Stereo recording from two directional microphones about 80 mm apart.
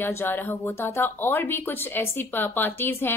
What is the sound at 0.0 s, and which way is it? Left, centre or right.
Speech, left.